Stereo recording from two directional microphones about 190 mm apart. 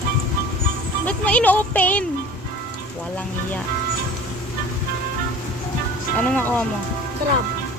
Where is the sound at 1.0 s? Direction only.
5° left (ahead or behind).